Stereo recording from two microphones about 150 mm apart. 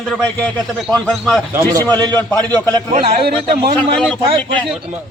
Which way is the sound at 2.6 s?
10° left (ahead or behind).